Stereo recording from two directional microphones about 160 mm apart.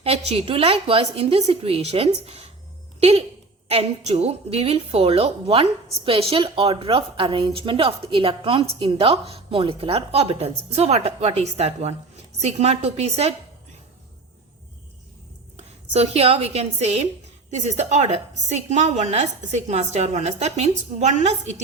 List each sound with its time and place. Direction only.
0.0 s a woman's voice: 40° right (ahead or behind)
15.5 s a woman's voice: 40° right (ahead or behind)